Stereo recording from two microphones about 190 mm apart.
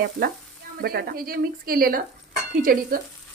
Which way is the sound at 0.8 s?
55° right (ahead or behind).